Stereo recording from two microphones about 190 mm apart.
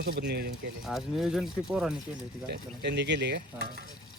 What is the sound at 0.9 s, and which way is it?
Speech, centre (ahead or behind).